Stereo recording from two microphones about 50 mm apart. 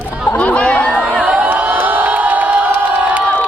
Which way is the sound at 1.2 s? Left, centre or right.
Right.